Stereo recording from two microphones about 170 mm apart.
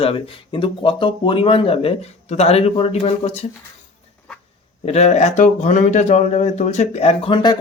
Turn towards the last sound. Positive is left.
turn(degrees=25)  # may be behind; listen again after turning